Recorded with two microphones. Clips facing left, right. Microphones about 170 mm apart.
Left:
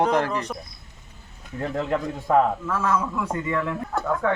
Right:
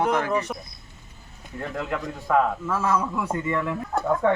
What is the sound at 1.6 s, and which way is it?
Speech, 35° left (ahead or behind).